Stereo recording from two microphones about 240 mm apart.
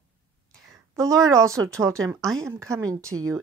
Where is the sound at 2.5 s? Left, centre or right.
Centre.